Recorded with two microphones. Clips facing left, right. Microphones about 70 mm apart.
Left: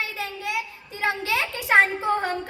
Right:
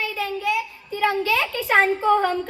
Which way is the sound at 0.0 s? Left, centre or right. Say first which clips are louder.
Right 4 dB; left.